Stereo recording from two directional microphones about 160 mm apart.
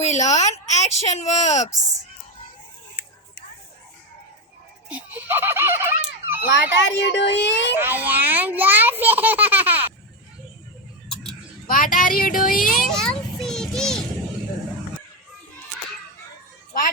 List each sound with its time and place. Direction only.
0.0 s speech: 45° left (ahead or behind)
4.9 s a sound: 10° right (ahead or behind)
6.6 s a woman's voice: 90° left
7.8 s a child's voice: 10° right (ahead or behind)
11.1 s a sound: 5° left (ahead or behind)
11.7 s speech: 60° left (ahead or behind)
12.7 s children playing: 5° left (ahead or behind)